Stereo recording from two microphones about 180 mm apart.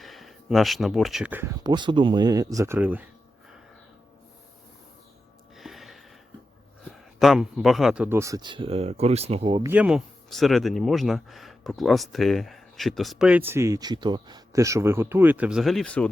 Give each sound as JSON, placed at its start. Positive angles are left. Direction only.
{"t": 0.0, "sound": "speech", "side_deg": 0}
{"t": 1.6, "sound": "speech", "side_deg": -25}
{"t": 5.5, "sound": "a sound", "side_deg": 0}
{"t": 6.9, "sound": "speech", "side_deg": 0}
{"t": 9.6, "sound": "speech", "side_deg": -5}